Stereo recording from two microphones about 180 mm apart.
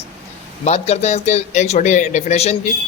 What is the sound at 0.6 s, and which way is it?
A woman's voice, 35° left (ahead or behind).